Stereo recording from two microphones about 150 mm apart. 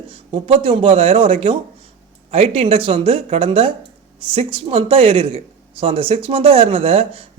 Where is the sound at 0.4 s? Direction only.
40° right (ahead or behind).